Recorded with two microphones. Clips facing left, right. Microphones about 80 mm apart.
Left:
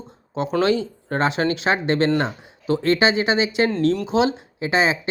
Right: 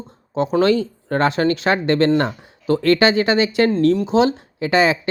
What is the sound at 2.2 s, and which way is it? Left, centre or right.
Speech, right.